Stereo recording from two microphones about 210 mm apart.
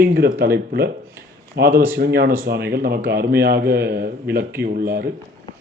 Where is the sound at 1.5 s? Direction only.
50° right (ahead or behind).